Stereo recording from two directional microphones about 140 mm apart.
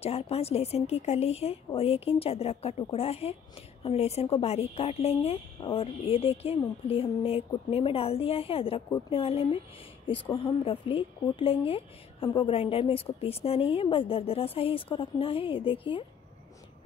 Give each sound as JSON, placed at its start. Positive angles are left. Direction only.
{"t": 0.0, "sound": "speech", "side_deg": 45}